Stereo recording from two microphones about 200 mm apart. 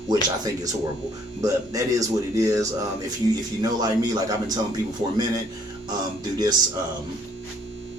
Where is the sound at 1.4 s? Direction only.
15° right (ahead or behind).